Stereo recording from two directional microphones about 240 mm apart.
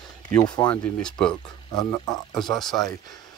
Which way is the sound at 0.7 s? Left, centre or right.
Centre.